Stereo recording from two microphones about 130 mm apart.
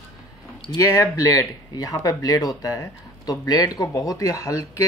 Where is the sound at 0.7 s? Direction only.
25° left (ahead or behind).